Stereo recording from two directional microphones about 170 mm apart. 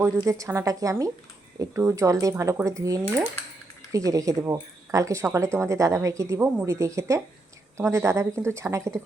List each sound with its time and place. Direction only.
0.2 s a woman's voice: 20° right (ahead or behind)